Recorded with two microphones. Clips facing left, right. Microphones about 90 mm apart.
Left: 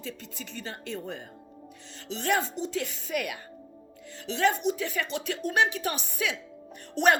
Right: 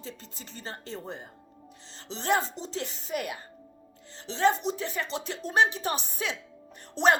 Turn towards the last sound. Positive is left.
turn(degrees=-25)  # may be behind; listen again after turning